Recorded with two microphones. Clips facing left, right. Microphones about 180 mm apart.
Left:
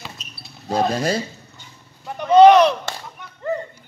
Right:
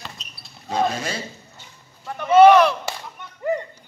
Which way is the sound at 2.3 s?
20° left (ahead or behind).